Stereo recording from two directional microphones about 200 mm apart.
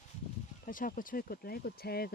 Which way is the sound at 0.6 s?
45° left (ahead or behind).